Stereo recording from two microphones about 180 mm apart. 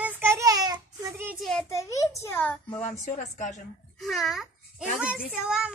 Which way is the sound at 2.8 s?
45° left (ahead or behind).